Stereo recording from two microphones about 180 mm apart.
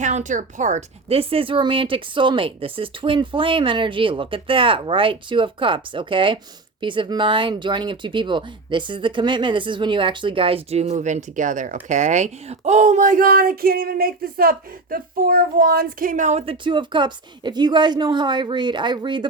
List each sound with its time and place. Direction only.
0.0 s speech: 40° right (ahead or behind); by 19.3 s 25° right (ahead or behind)